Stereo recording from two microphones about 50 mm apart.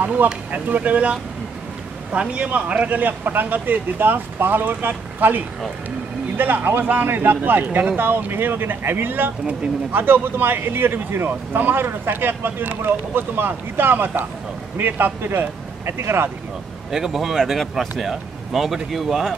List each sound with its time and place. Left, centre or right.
0.0 s speech: right
2.1 s speech: right
16.9 s speech: centre